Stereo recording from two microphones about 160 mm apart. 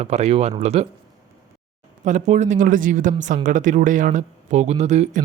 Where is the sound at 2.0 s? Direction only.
50° right (ahead or behind).